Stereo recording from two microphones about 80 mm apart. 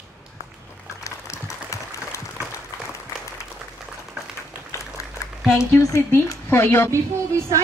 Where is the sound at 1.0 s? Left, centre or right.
Left.